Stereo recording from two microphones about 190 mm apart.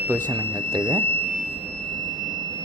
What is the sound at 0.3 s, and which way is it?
Speech, 20° right (ahead or behind).